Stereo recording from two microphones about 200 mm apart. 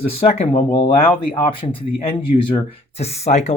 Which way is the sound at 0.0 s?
30° left (ahead or behind).